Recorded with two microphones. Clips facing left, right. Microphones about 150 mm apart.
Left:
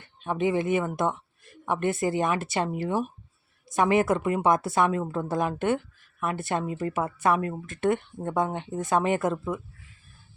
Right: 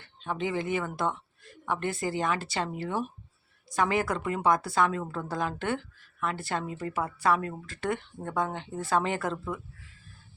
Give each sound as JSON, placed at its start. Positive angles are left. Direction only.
{"t": 0.0, "sound": "a woman's voice", "side_deg": 20}